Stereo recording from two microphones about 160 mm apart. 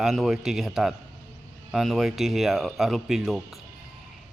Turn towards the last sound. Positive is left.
turn(degrees=0)  # may be behind; listen again after turning